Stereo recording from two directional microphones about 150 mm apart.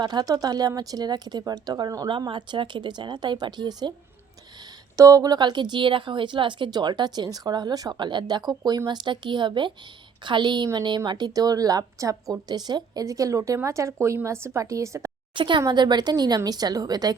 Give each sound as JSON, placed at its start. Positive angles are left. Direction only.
{"t": 0.0, "sound": "a woman's voice", "side_deg": -30}
{"t": 4.9, "sound": "a woman's voice", "side_deg": -20}
{"t": 15.4, "sound": "a woman's voice", "side_deg": -30}